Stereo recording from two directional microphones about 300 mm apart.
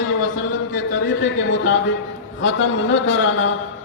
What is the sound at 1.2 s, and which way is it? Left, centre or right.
Speech, left.